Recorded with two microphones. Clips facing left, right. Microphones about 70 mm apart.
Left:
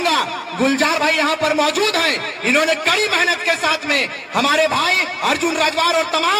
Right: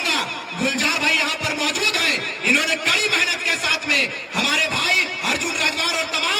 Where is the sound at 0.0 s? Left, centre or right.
Left.